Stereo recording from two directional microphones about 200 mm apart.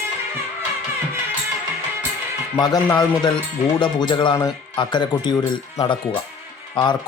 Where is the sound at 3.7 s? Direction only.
25° left (ahead or behind).